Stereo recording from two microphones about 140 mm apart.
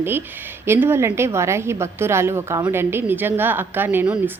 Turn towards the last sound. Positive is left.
turn(degrees=-10)  # may be behind; listen again after turning